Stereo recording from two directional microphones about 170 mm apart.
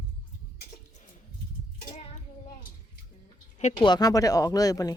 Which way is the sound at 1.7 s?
45° left (ahead or behind).